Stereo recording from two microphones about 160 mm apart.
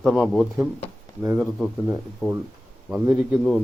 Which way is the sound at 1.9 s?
15° right (ahead or behind).